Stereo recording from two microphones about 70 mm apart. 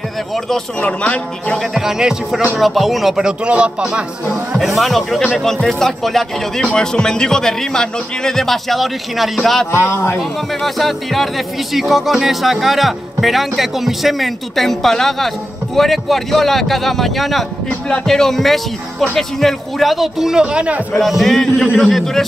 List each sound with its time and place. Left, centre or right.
0.7 s speech: centre
1.6 s speech: centre
3.8 s speech: centre
9.8 s a man's voice: left
10.1 s speech: centre
21.0 s speech: centre